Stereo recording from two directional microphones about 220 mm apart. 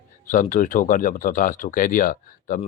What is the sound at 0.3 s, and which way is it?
Speech, 35° left (ahead or behind).